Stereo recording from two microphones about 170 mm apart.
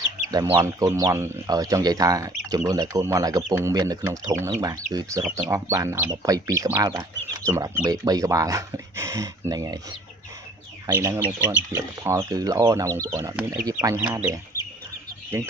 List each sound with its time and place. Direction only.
0.3 s speech: 25° right (ahead or behind)
10.8 s speech: 15° right (ahead or behind)